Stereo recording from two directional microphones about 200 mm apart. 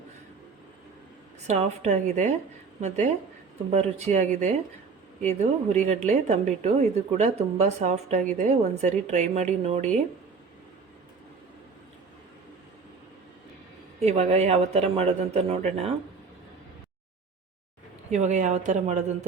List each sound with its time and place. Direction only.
1.5 s speech: 35° right (ahead or behind)
14.0 s speech: 30° right (ahead or behind)
18.1 s speech: 35° right (ahead or behind)